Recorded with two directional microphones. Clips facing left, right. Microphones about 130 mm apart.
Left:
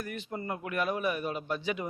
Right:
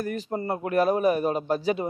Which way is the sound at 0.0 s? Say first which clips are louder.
Right 8 dB; 40° right (ahead or behind).